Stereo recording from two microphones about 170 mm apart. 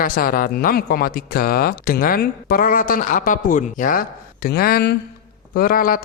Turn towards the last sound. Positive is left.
turn(degrees=55)  # may be behind; listen again after turning